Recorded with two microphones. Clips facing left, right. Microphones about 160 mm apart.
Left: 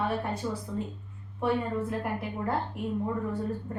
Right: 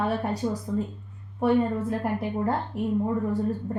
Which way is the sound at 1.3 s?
35° right (ahead or behind).